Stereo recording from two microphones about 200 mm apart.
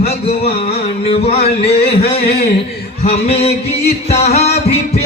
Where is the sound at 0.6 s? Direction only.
30° left (ahead or behind).